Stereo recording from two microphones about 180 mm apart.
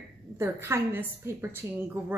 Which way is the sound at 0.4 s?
15° right (ahead or behind).